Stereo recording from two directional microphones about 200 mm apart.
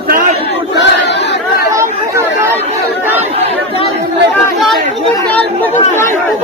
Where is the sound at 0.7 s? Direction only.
60° left (ahead or behind).